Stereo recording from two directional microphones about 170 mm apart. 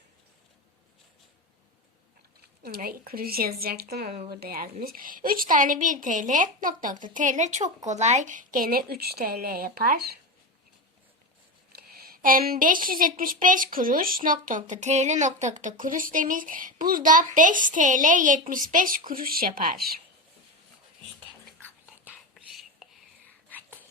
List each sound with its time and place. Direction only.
2.6 s a woman's voice: 60° right (ahead or behind)
11.8 s a woman's voice: 65° right (ahead or behind)
22.8 s whispering: 5° right (ahead or behind)